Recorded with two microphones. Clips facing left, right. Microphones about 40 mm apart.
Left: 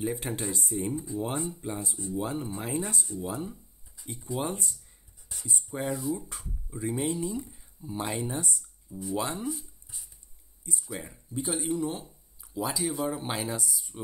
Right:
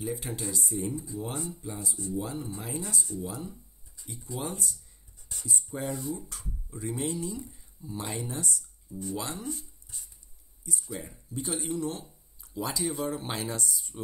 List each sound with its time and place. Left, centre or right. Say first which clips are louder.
0.0 s speech: left 3 dB; left
0.8 s speech: left 3 dB; left
1.6 s speech: left 3 dB; left
2.0 s speech: left 1 dB; left
2.6 s speech: left 3 dB; left
4.0 s a sound: left 4 dB; centre
4.4 s speech: left 2 dB; left
5.3 s speech: right 1 dB; centre
5.9 s speech: left 4 dB; centre
6.1 s speech: left 3 dB; centre
9.4 s speech: left 3 dB; centre